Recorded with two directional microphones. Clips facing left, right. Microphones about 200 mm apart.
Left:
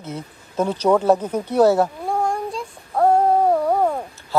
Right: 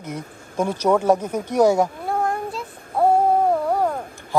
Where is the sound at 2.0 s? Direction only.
Centre (ahead or behind).